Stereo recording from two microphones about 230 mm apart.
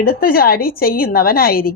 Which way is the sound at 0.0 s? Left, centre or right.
Left.